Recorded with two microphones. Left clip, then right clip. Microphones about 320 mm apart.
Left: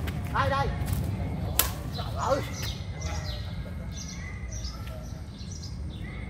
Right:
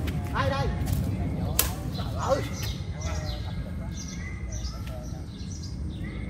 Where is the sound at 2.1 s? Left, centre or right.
Centre.